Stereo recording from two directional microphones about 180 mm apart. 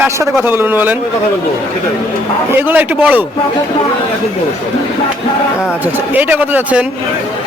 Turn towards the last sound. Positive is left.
turn(degrees=-10)  # may be behind; listen again after turning